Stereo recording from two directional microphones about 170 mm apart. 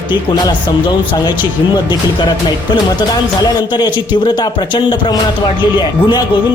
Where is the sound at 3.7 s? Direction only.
25° left (ahead or behind).